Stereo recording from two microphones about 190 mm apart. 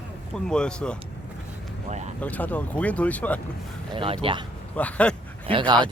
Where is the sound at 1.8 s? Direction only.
35° right (ahead or behind).